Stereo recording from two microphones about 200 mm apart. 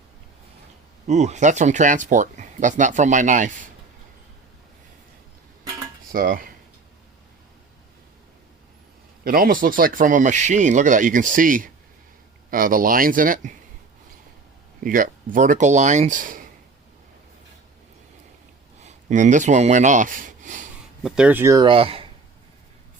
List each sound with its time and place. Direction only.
1.0 s speech: 35° right (ahead or behind)
6.1 s cutlery: 45° right (ahead or behind)
9.2 s speech: 45° right (ahead or behind)
14.8 s speech: 45° right (ahead or behind)
18.8 s speech: 35° right (ahead or behind)
21.0 s speech: 5° right (ahead or behind); by 22.1 s 25° right (ahead or behind)